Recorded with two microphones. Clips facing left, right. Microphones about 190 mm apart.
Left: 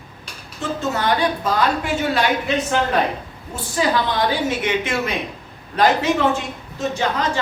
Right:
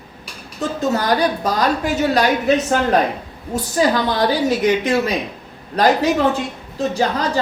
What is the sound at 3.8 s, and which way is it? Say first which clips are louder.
A woman's voice: right 2 dB; 45° right (ahead or behind).